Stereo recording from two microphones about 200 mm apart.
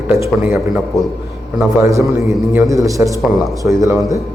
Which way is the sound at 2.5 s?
15° right (ahead or behind).